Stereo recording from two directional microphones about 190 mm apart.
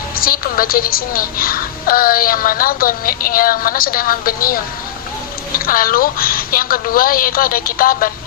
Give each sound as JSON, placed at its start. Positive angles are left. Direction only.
{"t": 0.2, "sound": "a woman's voice", "side_deg": 50}